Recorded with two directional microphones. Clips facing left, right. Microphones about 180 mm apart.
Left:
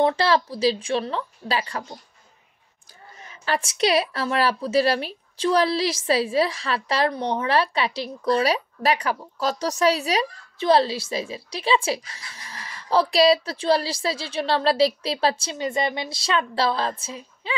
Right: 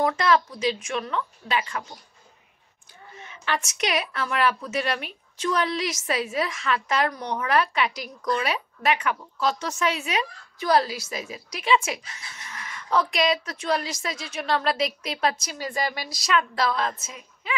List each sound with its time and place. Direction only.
0.0 s a woman's voice: 30° left (ahead or behind)
3.2 s a woman's voice: 35° left (ahead or behind)